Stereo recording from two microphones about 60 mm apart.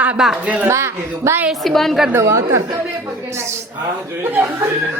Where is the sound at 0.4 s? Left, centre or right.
Right.